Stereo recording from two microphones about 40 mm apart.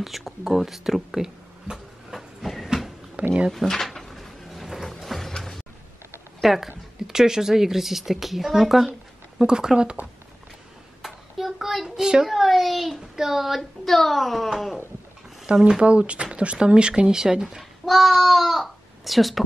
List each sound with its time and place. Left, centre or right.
0.0 s speech: centre
2.1 s train: centre
3.2 s drawer open or close: right
3.5 s drawer open or close: centre
4.8 s a sound: centre
6.4 s speech: centre
9.4 s speech: centre
11.0 s child singing: centre
12.0 s speech: centre
12.3 s speech: centre
13.1 s child singing: centre
13.6 s speech: centre
15.4 s speech: right
17.8 s a child's voice: centre